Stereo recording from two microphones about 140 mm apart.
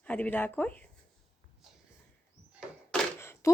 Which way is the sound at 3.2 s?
20° left (ahead or behind).